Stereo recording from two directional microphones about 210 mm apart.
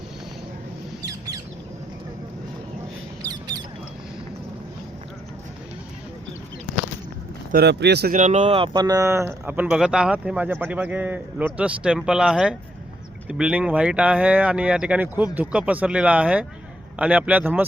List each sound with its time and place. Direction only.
3.2 s mouse: 20° right (ahead or behind)
7.5 s speech: 50° right (ahead or behind)
8.1 s speech: 35° right (ahead or behind); by 17.7 s 10° right (ahead or behind)